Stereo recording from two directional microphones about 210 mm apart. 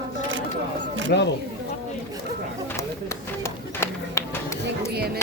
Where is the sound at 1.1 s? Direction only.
55° left (ahead or behind).